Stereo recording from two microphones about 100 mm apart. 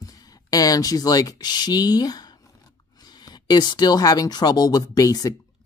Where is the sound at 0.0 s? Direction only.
35° left (ahead or behind).